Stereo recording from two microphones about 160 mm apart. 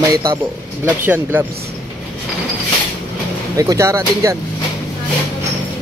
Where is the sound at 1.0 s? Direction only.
10° right (ahead or behind).